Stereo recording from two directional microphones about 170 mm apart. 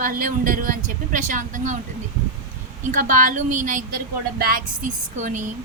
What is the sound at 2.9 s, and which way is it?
A woman's voice, 50° right (ahead or behind).